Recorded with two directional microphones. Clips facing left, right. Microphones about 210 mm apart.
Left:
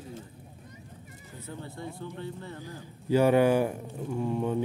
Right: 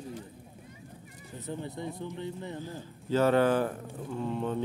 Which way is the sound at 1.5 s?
20° right (ahead or behind).